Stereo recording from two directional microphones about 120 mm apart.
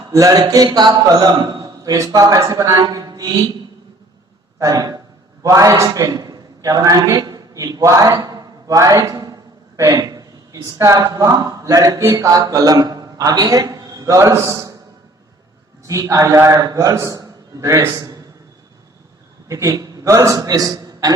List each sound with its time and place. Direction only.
0.1 s a man's voice: 30° right (ahead or behind)
4.6 s a man's voice: 30° right (ahead or behind)
15.9 s a man's voice: 30° right (ahead or behind)
19.5 s a man's voice: 25° right (ahead or behind)